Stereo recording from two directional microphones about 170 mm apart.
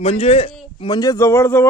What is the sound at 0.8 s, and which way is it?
Speech, 25° left (ahead or behind).